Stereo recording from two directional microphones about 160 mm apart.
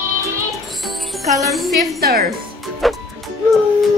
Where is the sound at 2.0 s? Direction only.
75° right (ahead or behind).